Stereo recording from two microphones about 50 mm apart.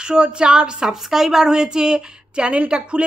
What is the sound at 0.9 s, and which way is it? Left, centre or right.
A woman's voice, centre.